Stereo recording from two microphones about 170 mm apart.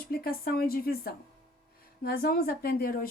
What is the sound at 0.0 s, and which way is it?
Speech, 60° left (ahead or behind).